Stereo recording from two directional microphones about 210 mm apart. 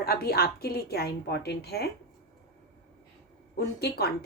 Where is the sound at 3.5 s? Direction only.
50° left (ahead or behind).